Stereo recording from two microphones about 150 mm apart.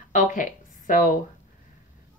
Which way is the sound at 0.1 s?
55° left (ahead or behind).